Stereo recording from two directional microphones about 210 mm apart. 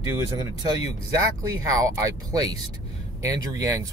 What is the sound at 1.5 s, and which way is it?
Speech, 15° right (ahead or behind).